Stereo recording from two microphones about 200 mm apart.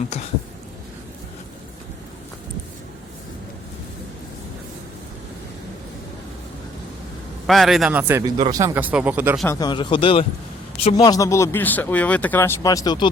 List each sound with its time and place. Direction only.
7.4 s speech: centre (ahead or behind)
9.5 s speech: 20° left (ahead or behind)